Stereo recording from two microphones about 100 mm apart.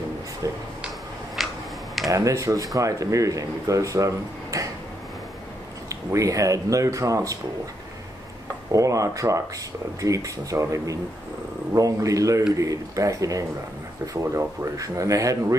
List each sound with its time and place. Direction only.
1.4 s a sound: centre (ahead or behind)
2.0 s speech: 35° right (ahead or behind)
5.9 s speech: 35° right (ahead or behind)
8.7 s speech: 35° right (ahead or behind)